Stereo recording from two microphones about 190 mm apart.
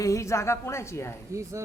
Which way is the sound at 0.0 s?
15° left (ahead or behind).